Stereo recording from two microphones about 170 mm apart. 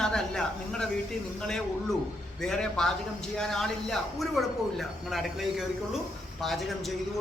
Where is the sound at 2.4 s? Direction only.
5° left (ahead or behind).